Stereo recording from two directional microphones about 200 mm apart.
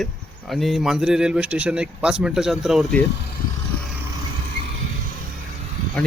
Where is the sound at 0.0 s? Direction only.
Centre (ahead or behind).